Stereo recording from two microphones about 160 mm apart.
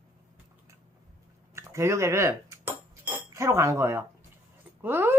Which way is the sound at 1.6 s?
15° right (ahead or behind).